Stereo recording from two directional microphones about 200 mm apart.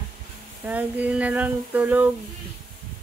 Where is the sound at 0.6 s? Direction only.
10° right (ahead or behind).